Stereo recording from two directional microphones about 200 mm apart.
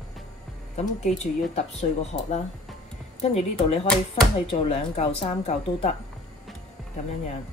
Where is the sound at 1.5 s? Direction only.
30° left (ahead or behind).